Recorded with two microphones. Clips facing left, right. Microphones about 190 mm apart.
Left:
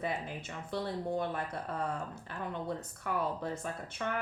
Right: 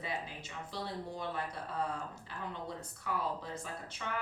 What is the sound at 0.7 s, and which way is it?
Speech, 55° left (ahead or behind).